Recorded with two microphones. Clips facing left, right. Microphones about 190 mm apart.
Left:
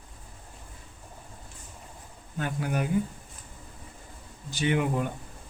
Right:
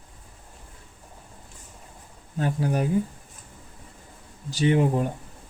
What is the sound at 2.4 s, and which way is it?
Speech, 35° right (ahead or behind).